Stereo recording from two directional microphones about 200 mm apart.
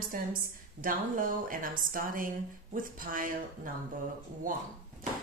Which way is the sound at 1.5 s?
45° right (ahead or behind).